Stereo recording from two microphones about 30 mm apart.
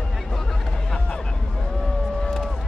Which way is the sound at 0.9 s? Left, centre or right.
Left.